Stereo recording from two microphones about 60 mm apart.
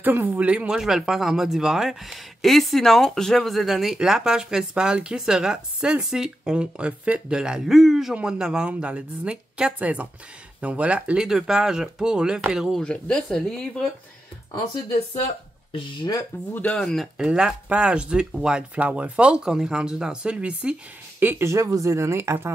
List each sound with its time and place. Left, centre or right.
0.0 s speech: right
0.5 s speech: right
0.7 s speech: centre
8.1 s speech: centre
12.8 s speech: centre
13.5 s speech: centre
16.3 s speech: left
16.7 s speech: centre
17.3 s speech: centre
21.2 s speech: right
21.5 s speech: right